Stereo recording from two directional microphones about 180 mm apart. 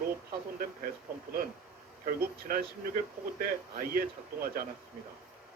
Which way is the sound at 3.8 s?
55° right (ahead or behind).